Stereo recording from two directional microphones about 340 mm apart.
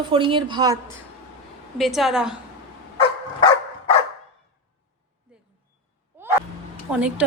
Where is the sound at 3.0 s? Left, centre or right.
Centre.